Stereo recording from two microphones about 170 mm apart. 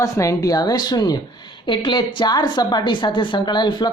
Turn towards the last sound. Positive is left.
turn(degrees=25)  # may be behind; listen again after turning